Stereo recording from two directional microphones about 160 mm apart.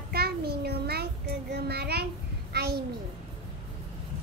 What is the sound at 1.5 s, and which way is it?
Child singing, 90° right.